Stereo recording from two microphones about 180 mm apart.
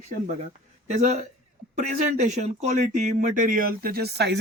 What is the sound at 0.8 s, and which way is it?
Speech, 40° right (ahead or behind).